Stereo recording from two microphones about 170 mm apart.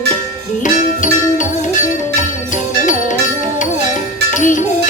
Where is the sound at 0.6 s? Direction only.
50° left (ahead or behind).